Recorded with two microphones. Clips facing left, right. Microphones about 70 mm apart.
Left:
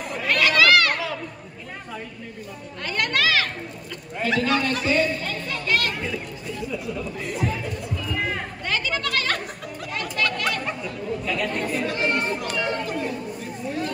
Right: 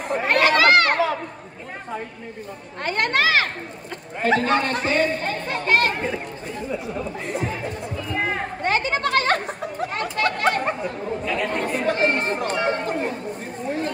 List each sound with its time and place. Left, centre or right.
0.1 s chatter: right
2.8 s speech: right
7.6 s music: right
8.6 s chatter: right